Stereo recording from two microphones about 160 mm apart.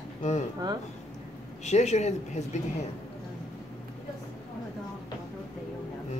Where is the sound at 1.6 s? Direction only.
45° left (ahead or behind).